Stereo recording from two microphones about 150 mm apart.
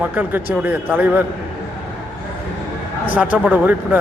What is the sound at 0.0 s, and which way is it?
A man's voice, 10° right (ahead or behind).